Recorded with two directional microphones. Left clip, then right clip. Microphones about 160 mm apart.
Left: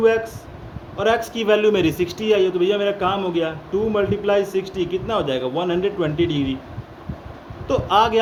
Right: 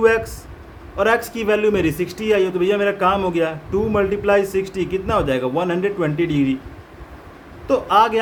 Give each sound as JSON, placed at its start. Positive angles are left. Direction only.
{"t": 0.9, "sound": "speech", "side_deg": -40}
{"t": 7.7, "sound": "speech", "side_deg": -35}